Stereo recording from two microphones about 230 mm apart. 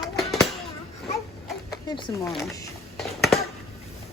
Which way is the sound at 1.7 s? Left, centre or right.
Centre.